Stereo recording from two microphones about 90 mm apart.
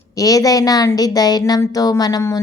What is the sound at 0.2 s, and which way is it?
A woman's voice, 40° left (ahead or behind).